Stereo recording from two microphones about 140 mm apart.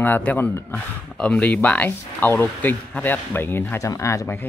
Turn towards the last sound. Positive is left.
turn(degrees=20)  # may be behind; listen again after turning